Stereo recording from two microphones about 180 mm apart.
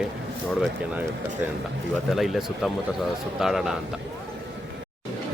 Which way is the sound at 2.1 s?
Centre (ahead or behind).